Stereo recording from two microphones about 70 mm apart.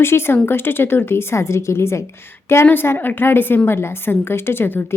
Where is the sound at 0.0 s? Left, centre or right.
Left.